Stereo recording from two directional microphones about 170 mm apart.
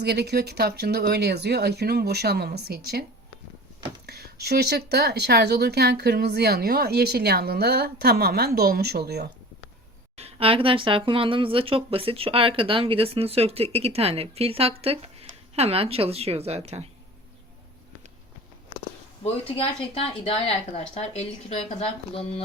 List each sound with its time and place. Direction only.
0.0 s speech: 75° right (ahead or behind)
4.0 s speech: 70° right (ahead or behind)
10.2 s speech: 35° right (ahead or behind)
19.2 s speech: 35° left (ahead or behind)